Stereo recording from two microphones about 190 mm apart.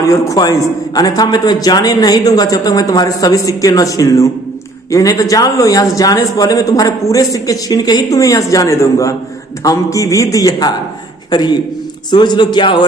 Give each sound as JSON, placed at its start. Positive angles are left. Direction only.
{"t": 0.0, "sound": "a man's voice", "side_deg": 15}